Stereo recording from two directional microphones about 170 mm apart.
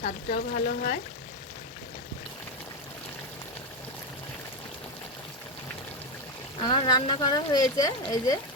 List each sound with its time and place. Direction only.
0.0 s speech: 55° left (ahead or behind)
6.6 s speech: 25° left (ahead or behind)